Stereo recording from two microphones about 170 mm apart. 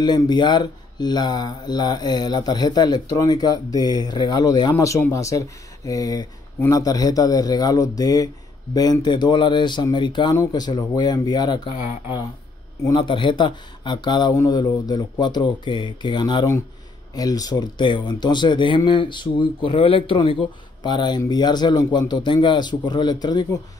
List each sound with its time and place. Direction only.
0.0 s speech: 25° left (ahead or behind)
12.8 s speech: 25° left (ahead or behind)